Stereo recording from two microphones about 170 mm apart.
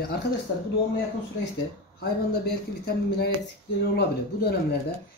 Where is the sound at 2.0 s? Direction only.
65° left (ahead or behind).